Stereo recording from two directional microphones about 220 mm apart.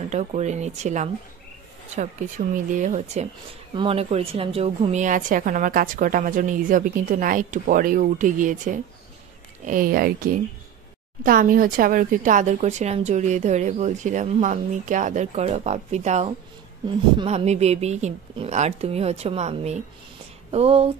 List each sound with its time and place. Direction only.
0.1 s a woman's voice: 30° right (ahead or behind)